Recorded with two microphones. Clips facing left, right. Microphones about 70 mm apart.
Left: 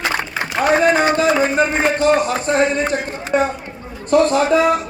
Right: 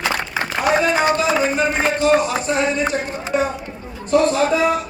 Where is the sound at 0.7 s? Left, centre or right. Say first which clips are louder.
Left 3 dB; left.